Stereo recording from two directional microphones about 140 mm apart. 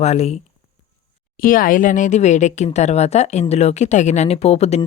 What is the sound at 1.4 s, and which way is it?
Speech, 90° left.